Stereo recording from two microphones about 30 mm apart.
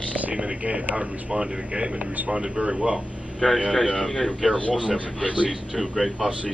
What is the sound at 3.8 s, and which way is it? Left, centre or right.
Speech, left.